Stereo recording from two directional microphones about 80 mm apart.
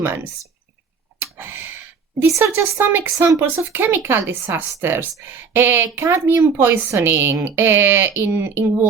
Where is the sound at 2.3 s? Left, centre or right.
Right.